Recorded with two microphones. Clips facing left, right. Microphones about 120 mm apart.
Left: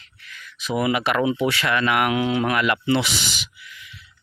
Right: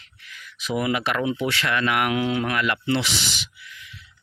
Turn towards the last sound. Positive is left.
turn(degrees=10)  # may be behind; listen again after turning